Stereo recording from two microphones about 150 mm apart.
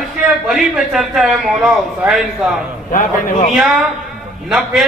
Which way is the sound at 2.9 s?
60° left (ahead or behind).